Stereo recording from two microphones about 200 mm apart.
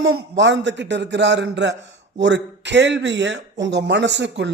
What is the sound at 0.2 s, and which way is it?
Speech, 65° right (ahead or behind).